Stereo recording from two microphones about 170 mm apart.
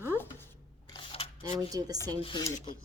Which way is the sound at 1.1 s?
35° left (ahead or behind).